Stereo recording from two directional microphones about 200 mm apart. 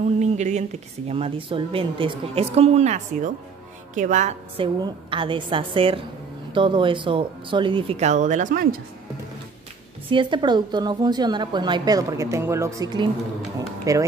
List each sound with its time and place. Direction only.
0.0 s a woman's voice: 35° right (ahead or behind)
4.8 s a woman's voice: 25° right (ahead or behind)
10.0 s a woman's voice: 25° right (ahead or behind)